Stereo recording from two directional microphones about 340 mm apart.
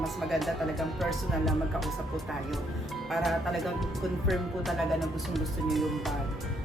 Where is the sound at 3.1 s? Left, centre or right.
Centre.